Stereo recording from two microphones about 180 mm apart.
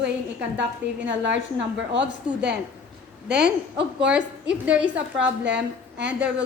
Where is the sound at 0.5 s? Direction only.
80° right.